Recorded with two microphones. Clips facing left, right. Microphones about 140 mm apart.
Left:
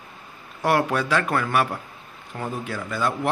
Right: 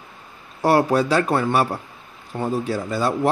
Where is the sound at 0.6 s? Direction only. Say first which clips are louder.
Right 4 dB; 35° right (ahead or behind).